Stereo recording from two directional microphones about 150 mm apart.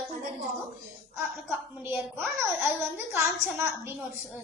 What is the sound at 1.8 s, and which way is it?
Speech, 15° right (ahead or behind).